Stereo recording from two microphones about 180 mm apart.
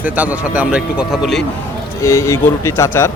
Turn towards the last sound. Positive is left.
turn(degrees=15)  # may be behind; listen again after turning